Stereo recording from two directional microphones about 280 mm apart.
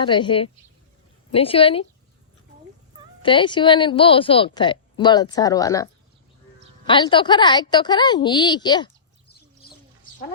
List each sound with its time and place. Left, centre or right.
0.0 s a woman's voice: centre
3.2 s a woman's voice: centre